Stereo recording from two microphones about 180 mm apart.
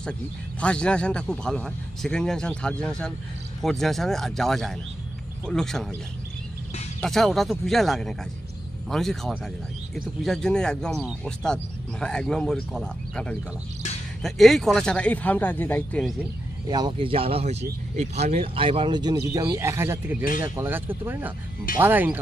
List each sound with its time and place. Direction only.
0.6 s speech: 5° left (ahead or behind)
7.0 s speech: centre (ahead or behind)
16.6 s speech: 25° right (ahead or behind)